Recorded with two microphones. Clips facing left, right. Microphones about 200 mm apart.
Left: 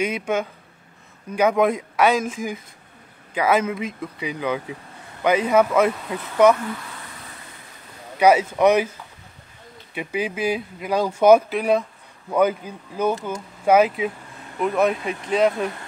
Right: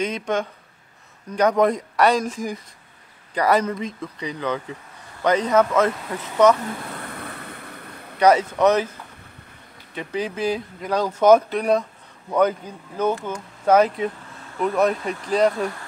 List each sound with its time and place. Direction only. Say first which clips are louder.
0.0 s speech: left 1 dB; 10° left (ahead or behind)
7.1 s vehicle: right 7 dB; 60° right (ahead or behind)
8.2 s speech: left 1 dB; 10° left (ahead or behind)
9.9 s speech: left 1 dB; 10° left (ahead or behind)